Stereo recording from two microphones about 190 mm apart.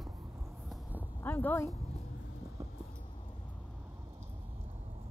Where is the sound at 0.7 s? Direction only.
10° right (ahead or behind).